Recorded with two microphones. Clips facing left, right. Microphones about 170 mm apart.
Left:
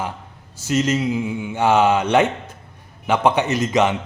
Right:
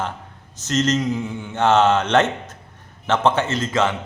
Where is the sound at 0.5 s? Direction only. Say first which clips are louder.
Left 1 dB; 10° left (ahead or behind).